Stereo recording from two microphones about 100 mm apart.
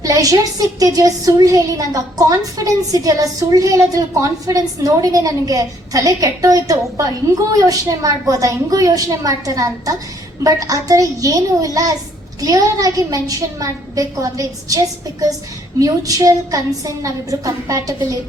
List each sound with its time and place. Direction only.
0.0 s speech: 35° right (ahead or behind)